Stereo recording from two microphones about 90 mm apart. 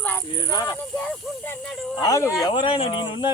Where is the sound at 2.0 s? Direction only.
40° left (ahead or behind).